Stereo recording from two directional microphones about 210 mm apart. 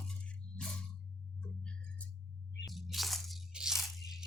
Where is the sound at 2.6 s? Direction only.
Centre (ahead or behind).